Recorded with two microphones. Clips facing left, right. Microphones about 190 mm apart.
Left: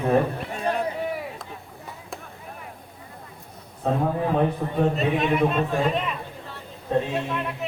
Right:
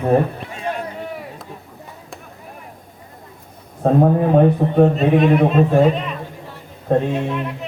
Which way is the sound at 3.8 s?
50° right (ahead or behind).